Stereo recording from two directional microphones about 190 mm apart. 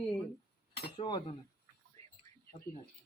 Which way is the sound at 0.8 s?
25° left (ahead or behind).